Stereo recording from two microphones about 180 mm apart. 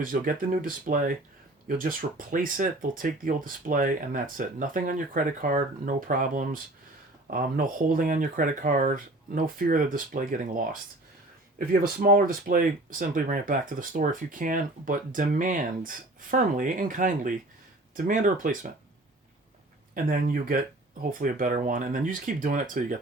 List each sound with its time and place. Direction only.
0.0 s speech: 50° right (ahead or behind)
19.9 s speech: 50° right (ahead or behind)